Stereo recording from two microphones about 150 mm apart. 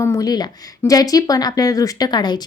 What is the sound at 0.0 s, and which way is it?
A woman's voice, 20° left (ahead or behind).